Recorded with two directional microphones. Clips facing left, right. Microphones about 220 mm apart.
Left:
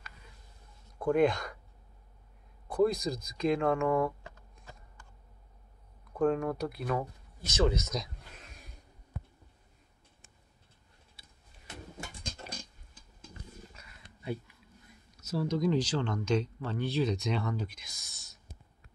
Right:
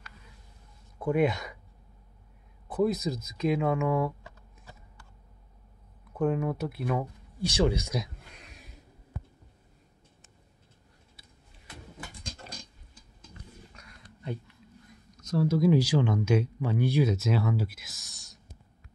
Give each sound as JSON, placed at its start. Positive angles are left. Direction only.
{"t": 0.9, "sound": "speech", "side_deg": -5}
{"t": 2.7, "sound": "speech", "side_deg": -5}
{"t": 6.1, "sound": "speech", "side_deg": -5}
{"t": 11.1, "sound": "a sound", "side_deg": 25}
{"t": 13.7, "sound": "a sound", "side_deg": 5}
{"t": 15.4, "sound": "speech", "side_deg": -10}